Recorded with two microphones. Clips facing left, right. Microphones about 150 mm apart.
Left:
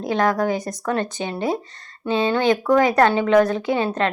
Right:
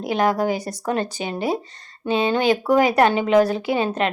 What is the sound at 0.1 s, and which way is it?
A woman's voice, 30° right (ahead or behind).